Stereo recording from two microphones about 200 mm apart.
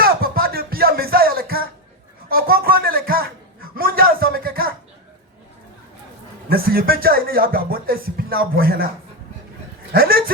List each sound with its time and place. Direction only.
0.0 s music: 50° right (ahead or behind)
2.3 s a sound: 45° right (ahead or behind)
6.5 s speech: 50° right (ahead or behind)
9.9 s speech: 50° right (ahead or behind)